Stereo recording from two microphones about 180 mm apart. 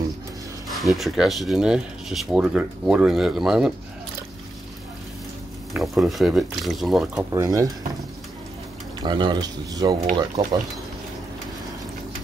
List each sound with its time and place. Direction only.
0.7 s speech: centre (ahead or behind)
5.7 s speech: centre (ahead or behind)
7.3 s speech: 20° right (ahead or behind)
9.0 s speech: 25° right (ahead or behind)